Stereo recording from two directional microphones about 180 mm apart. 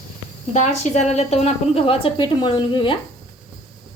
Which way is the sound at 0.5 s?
40° left (ahead or behind).